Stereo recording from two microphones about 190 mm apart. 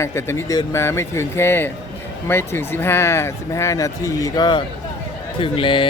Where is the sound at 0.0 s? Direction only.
15° left (ahead or behind).